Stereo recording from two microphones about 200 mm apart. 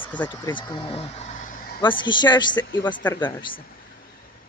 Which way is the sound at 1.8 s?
25° left (ahead or behind).